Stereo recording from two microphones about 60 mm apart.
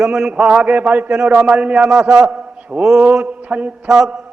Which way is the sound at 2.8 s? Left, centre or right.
Right.